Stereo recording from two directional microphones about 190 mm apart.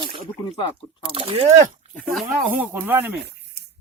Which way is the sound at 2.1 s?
5° right (ahead or behind).